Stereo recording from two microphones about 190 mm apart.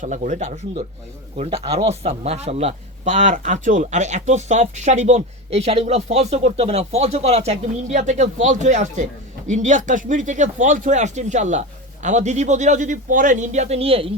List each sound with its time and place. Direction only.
0.0 s a man's voice: 40° right (ahead or behind)